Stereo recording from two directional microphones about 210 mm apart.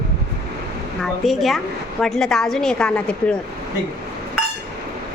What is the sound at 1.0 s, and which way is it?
A woman's voice, centre (ahead or behind).